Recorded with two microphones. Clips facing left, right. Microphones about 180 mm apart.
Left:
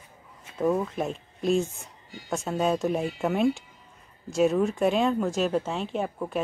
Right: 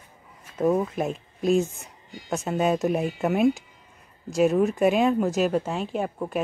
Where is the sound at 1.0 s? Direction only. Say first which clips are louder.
Right 2 dB; 5° right (ahead or behind).